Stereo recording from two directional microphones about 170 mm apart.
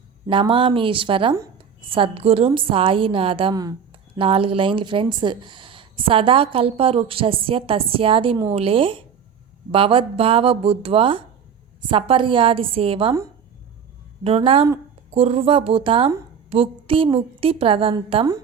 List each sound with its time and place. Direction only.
0.3 s speech: 30° right (ahead or behind)
4.2 s speech: 30° right (ahead or behind)
14.3 s speech: 35° right (ahead or behind)